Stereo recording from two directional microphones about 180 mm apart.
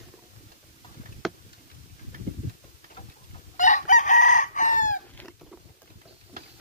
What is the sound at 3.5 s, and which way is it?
Chicken, 45° left (ahead or behind).